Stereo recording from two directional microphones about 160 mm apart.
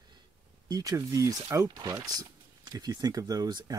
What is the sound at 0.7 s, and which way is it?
Speech, 20° right (ahead or behind).